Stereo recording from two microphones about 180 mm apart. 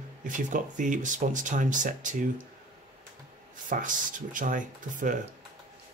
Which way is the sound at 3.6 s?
45° right (ahead or behind).